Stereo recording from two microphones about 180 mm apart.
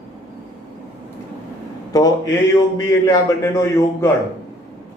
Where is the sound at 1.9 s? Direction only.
20° left (ahead or behind).